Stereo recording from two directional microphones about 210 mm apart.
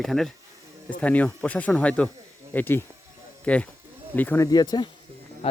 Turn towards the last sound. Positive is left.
turn(degrees=30)  # may be behind; listen again after turning